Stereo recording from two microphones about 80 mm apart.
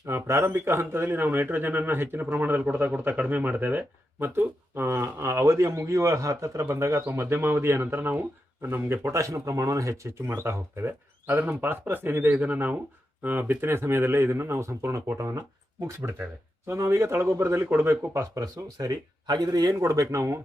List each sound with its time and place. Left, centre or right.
0.0 s a man's voice: right